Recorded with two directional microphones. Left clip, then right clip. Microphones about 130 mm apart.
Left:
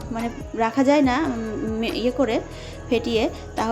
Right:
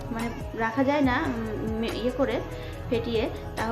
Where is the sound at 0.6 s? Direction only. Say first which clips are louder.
Left 6 dB; 50° left (ahead or behind).